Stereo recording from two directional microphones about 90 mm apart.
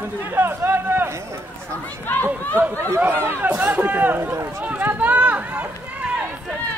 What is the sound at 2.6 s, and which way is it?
Speech, 30° right (ahead or behind).